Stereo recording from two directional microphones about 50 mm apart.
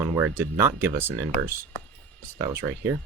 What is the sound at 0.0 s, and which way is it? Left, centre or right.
Speech, right.